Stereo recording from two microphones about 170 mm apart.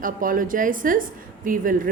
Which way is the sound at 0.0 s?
55° right (ahead or behind).